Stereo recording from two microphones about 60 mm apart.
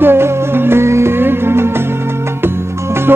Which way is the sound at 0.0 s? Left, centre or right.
Right.